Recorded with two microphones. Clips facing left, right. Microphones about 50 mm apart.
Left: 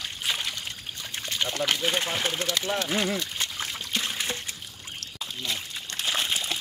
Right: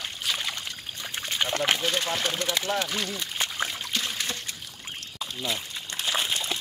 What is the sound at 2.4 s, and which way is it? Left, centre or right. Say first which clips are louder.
Speech: even; right.